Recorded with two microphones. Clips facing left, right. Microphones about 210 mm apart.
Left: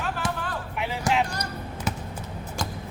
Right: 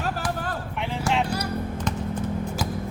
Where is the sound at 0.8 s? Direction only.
5° left (ahead or behind).